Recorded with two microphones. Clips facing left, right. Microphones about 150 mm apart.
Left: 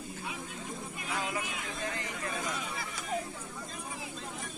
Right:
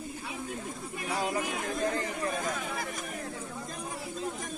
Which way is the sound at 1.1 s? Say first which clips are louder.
Right 5 dB; 35° right (ahead or behind).